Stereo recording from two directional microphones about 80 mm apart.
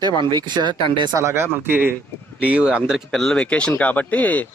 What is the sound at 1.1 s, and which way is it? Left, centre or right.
Speech, right.